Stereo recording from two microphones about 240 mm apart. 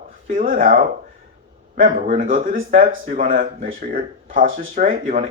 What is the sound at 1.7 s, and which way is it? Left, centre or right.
Speech, right.